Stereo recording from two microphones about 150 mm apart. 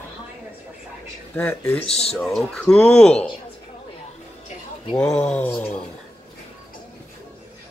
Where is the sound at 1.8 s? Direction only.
45° left (ahead or behind).